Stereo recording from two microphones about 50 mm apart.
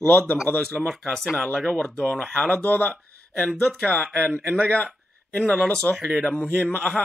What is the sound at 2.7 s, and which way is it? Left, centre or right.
Speech, left.